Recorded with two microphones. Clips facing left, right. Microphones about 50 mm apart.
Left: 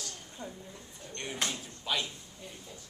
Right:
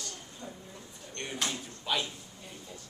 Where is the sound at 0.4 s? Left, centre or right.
Left.